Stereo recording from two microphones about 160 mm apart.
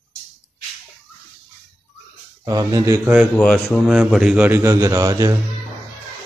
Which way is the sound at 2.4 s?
20° right (ahead or behind).